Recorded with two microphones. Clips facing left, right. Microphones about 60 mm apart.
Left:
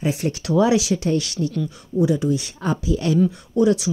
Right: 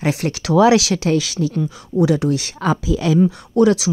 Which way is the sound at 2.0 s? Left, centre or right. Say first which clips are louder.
Right 3 dB; right.